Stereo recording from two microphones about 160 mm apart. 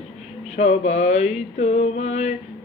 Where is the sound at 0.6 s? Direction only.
45° left (ahead or behind).